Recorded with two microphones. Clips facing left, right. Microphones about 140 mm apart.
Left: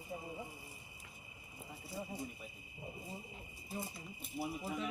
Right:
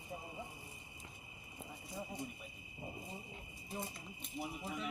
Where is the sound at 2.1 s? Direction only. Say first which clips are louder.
Even; 5° left (ahead or behind).